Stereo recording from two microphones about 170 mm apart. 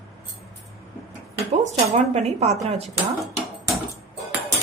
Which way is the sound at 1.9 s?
40° right (ahead or behind).